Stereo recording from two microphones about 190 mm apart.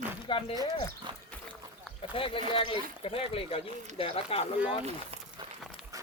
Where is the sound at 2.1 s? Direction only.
30° left (ahead or behind).